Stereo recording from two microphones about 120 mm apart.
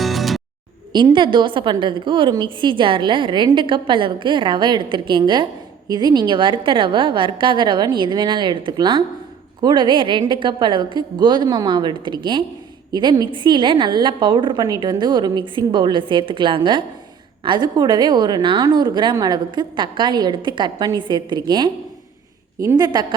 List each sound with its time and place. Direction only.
0.0 s music: centre (ahead or behind)
1.1 s a woman's voice: 40° right (ahead or behind)